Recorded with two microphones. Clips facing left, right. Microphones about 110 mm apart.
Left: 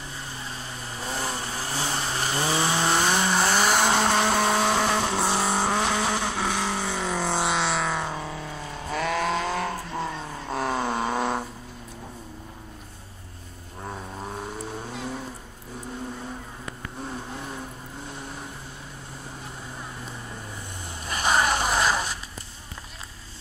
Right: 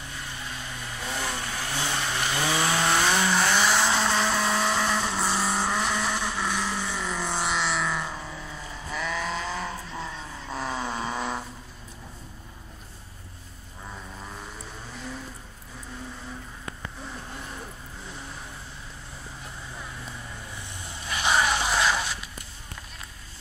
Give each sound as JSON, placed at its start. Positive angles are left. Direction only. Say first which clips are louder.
{"t": 0.2, "sound": "vehicle", "louder": "even", "side_deg": 30}
{"t": 3.5, "sound": "vehicle", "louder": "left 2 dB", "side_deg": 50}
{"t": 5.3, "sound": "vehicle", "louder": "left 2 dB", "side_deg": 25}
{"t": 5.6, "sound": "vehicle", "louder": "left 3 dB", "side_deg": 60}
{"t": 7.4, "sound": "music", "louder": "left 2 dB", "side_deg": 70}
{"t": 8.0, "sound": "vehicle", "louder": "left 4 dB", "side_deg": 60}
{"t": 21.0, "sound": "zipper", "louder": "left 1 dB", "side_deg": 40}